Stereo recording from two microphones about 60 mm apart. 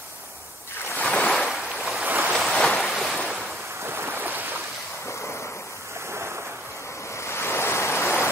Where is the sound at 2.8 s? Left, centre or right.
Centre.